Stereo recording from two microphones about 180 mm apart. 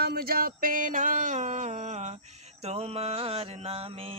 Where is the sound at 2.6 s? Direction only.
35° right (ahead or behind).